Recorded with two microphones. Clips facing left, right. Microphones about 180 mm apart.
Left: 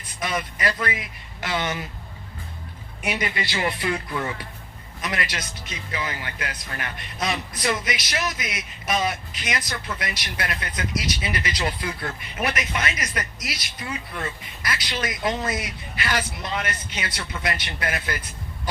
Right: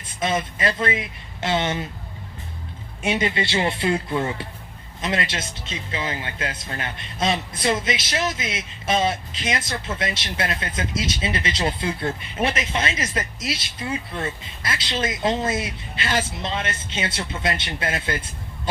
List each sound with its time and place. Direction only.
0.2 s a man's voice: 25° right (ahead or behind)
3.0 s a man's voice: 25° right (ahead or behind)